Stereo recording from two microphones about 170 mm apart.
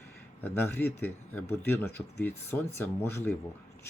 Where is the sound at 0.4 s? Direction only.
10° left (ahead or behind).